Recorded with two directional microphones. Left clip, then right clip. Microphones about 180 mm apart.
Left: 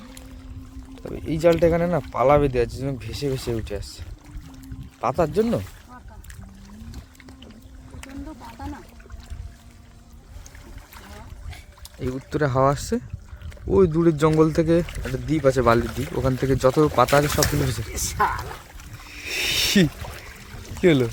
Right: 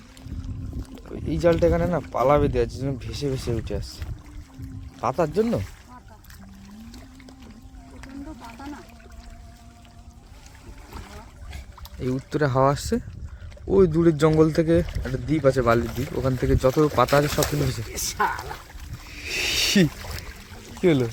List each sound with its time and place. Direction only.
1.3 s speech: 10° left (ahead or behind)
8.0 s boat: 15° left (ahead or behind)
10.9 s boat: 10° left (ahead or behind)
11.9 s speech: centre (ahead or behind)
19.0 s a sound: 5° left (ahead or behind)
20.8 s speech: 15° left (ahead or behind)